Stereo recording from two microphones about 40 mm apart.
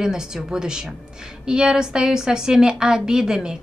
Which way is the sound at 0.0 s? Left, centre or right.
Centre.